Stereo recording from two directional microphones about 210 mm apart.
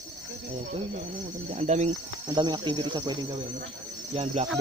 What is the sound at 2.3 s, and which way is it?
Speech, 20° right (ahead or behind).